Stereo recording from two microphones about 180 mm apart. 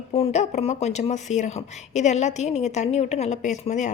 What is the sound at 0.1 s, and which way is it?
Speech, 35° left (ahead or behind).